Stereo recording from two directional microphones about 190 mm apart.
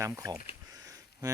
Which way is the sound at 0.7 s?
15° right (ahead or behind).